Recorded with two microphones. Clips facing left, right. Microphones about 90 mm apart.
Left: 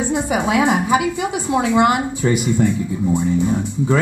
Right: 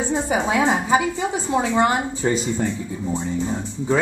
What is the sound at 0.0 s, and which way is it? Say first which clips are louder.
Speech: left 2 dB; 15° left (ahead or behind).